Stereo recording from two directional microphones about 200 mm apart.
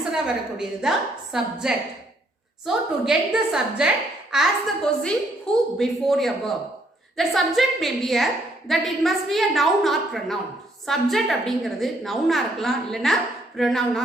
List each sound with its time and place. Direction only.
0.0 s a woman's voice: 5° right (ahead or behind)